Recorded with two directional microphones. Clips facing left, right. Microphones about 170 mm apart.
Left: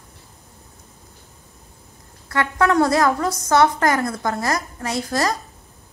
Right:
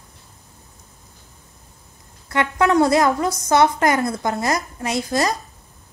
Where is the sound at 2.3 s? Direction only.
15° right (ahead or behind).